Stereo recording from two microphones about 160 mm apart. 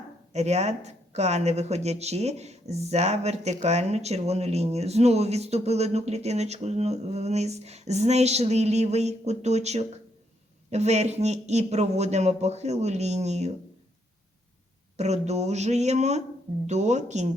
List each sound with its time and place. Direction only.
0.3 s speech: 45° right (ahead or behind)
14.9 s speech: 45° right (ahead or behind)